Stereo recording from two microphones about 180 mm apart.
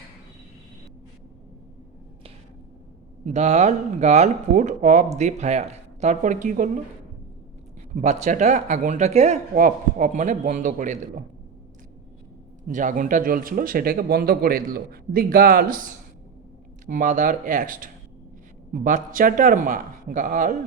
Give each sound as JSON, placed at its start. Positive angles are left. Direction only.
{"t": 3.2, "sound": "speech", "side_deg": -40}
{"t": 7.9, "sound": "speech", "side_deg": -45}
{"t": 12.6, "sound": "speech", "side_deg": -45}